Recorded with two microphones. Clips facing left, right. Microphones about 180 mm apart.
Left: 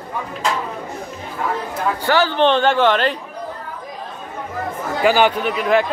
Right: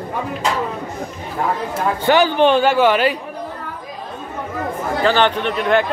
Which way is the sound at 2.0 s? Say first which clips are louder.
Right 3 dB; 15° right (ahead or behind).